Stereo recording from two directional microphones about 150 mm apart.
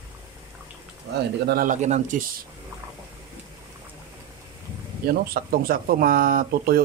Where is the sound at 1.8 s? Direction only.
50° right (ahead or behind).